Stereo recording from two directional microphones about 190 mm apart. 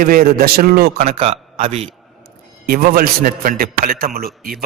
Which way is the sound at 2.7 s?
50° right (ahead or behind).